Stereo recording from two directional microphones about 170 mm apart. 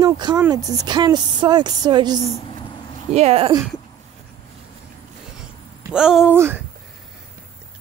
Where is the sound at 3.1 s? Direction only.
35° right (ahead or behind).